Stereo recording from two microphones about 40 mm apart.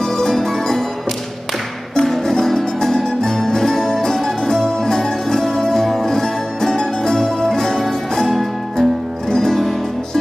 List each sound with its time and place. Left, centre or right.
0.0 s music: centre
2.0 s music: centre